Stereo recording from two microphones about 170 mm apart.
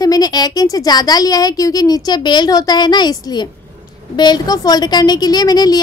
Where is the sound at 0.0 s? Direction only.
20° left (ahead or behind).